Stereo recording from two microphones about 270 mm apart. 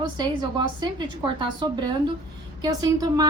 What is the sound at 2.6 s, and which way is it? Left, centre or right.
Speech, centre.